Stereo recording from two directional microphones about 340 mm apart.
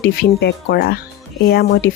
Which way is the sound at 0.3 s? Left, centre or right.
Left.